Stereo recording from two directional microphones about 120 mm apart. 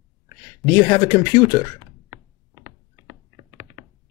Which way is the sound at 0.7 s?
25° left (ahead or behind).